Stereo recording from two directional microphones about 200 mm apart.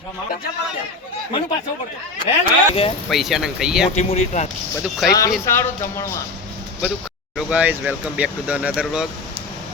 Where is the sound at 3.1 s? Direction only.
Centre (ahead or behind).